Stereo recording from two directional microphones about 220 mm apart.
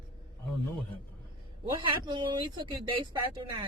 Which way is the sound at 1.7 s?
20° right (ahead or behind).